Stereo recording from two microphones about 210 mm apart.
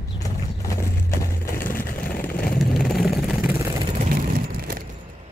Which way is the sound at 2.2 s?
45° left (ahead or behind).